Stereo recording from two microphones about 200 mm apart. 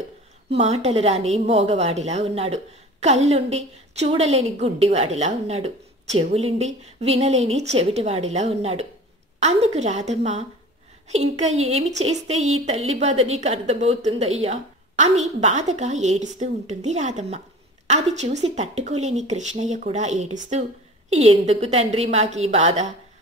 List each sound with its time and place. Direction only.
0.5 s a woman's voice: 30° right (ahead or behind)